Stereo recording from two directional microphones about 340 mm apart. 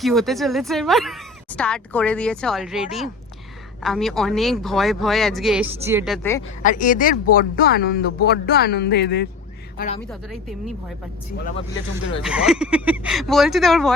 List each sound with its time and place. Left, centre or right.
0.0 s speech: centre
6.6 s a woman's voice: left
12.2 s speech: centre